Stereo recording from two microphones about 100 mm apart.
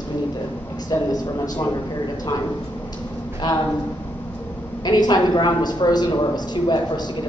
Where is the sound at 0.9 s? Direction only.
40° left (ahead or behind).